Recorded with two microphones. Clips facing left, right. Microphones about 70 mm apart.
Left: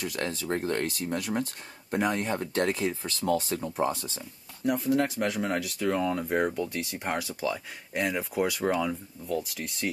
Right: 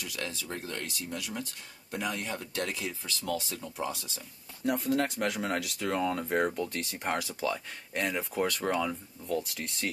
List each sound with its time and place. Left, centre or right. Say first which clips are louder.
0.0 s speech: left 6 dB; left
4.6 s speech: left 3 dB; centre